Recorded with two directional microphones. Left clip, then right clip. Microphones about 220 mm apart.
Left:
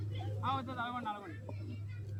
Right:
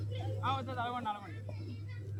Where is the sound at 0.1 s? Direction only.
35° right (ahead or behind).